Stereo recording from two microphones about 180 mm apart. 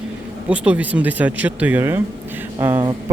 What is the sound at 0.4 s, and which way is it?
Speech, 5° right (ahead or behind).